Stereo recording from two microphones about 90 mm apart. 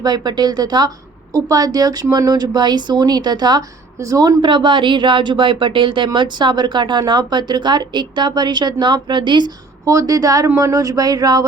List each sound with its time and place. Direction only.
0.0 s speech: 50° right (ahead or behind)
9.8 s a woman's voice: 40° right (ahead or behind)